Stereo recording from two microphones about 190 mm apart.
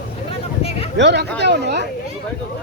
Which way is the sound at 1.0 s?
65° right (ahead or behind).